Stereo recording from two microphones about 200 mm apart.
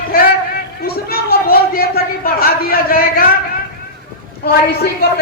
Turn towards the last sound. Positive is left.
turn(degrees=50)  # may be behind; listen again after turning